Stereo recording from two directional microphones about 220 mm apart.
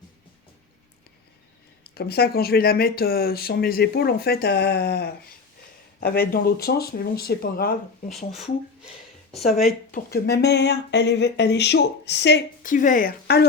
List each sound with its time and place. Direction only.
1.8 s speech: 45° left (ahead or behind)
9.9 s speech: 45° left (ahead or behind)
12.6 s speech: 35° left (ahead or behind)